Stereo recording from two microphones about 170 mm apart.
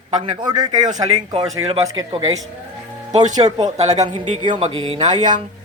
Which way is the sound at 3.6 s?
40° right (ahead or behind).